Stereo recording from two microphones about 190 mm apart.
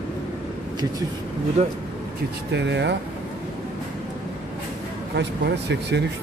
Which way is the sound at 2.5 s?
65° right (ahead or behind).